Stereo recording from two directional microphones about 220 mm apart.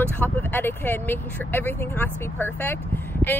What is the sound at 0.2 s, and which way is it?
Speech, 10° left (ahead or behind).